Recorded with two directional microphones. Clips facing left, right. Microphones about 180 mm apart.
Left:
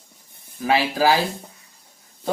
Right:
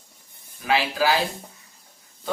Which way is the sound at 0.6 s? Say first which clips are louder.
Left 3 dB; 40° left (ahead or behind).